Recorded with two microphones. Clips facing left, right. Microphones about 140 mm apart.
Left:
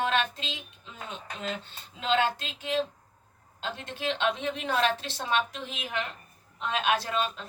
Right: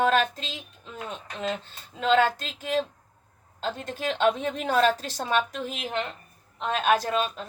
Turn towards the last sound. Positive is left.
turn(degrees=-45)  # may be behind; listen again after turning